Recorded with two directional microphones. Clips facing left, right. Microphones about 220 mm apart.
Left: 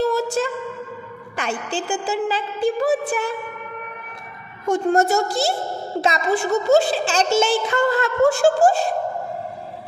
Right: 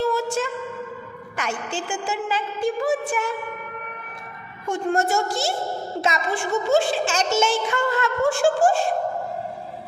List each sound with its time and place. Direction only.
0.4 s a sound: 35° left (ahead or behind)
1.3 s a woman's voice: 35° left (ahead or behind)
4.6 s a woman's voice: 40° left (ahead or behind)